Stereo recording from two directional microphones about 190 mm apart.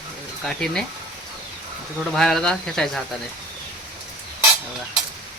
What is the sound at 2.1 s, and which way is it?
Speech, centre (ahead or behind).